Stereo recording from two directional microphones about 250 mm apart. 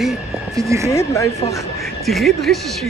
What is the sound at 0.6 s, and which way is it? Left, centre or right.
Speech, centre.